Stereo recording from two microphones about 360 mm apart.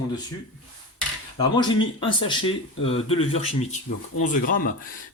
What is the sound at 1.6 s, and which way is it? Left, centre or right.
Speech, centre.